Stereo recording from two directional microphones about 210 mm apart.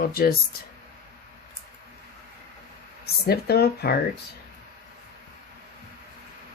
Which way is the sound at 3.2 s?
50° left (ahead or behind).